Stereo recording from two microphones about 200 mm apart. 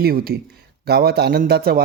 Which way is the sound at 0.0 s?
50° right (ahead or behind).